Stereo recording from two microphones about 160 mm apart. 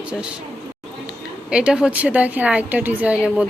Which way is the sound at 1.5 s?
5° right (ahead or behind).